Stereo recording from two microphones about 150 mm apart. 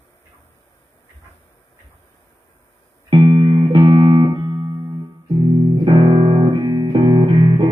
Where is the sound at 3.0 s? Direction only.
30° right (ahead or behind).